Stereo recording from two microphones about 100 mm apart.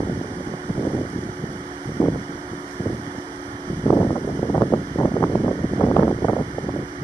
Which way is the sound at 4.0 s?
55° left (ahead or behind).